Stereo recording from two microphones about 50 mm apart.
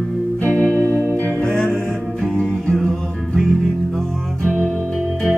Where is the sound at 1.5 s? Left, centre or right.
Centre.